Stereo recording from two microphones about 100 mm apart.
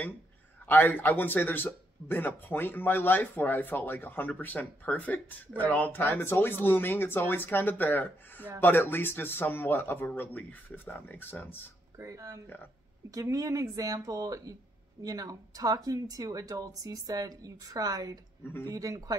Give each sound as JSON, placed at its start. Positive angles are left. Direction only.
{"t": 0.7, "sound": "a man's voice", "side_deg": 20}
{"t": 12.0, "sound": "speech", "side_deg": -30}